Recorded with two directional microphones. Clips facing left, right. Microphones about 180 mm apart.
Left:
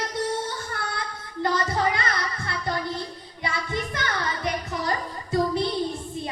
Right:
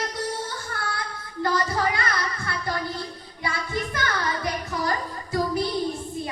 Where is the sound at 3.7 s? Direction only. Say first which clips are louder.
Right 3 dB; 20° left (ahead or behind).